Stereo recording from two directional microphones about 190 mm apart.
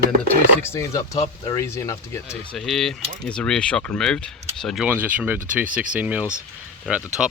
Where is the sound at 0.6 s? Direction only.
15° left (ahead or behind).